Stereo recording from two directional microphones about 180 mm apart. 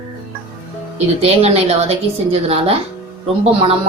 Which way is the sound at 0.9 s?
35° right (ahead or behind).